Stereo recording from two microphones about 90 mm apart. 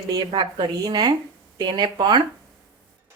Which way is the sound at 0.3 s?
60° right (ahead or behind).